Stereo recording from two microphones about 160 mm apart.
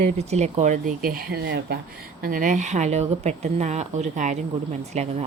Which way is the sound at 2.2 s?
60° right (ahead or behind).